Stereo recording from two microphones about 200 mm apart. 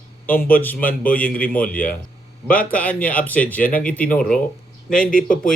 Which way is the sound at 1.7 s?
5° left (ahead or behind).